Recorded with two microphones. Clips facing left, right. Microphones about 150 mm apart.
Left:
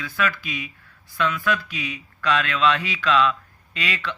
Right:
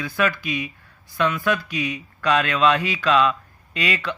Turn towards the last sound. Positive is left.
turn(degrees=-15)  # may be behind; listen again after turning